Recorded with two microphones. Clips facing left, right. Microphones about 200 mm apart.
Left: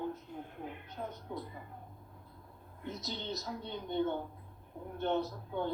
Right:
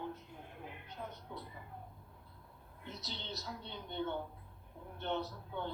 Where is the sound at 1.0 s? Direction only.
40° left (ahead or behind).